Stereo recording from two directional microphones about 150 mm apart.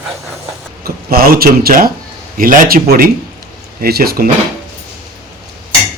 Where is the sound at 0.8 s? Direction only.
80° right.